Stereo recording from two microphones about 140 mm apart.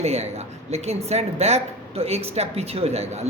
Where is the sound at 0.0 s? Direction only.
50° right (ahead or behind).